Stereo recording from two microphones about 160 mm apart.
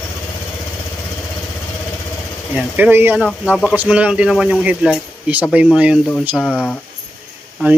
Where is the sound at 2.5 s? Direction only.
5° right (ahead or behind).